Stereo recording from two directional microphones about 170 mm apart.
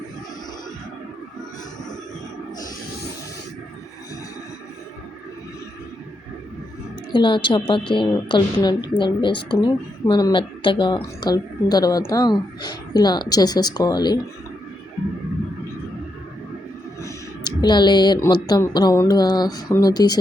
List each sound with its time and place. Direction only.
7.1 s a woman's voice: 30° left (ahead or behind)
17.0 s a woman's voice: 20° left (ahead or behind)